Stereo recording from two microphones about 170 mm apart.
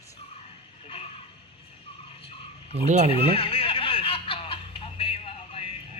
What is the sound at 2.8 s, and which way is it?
Speech, 45° right (ahead or behind).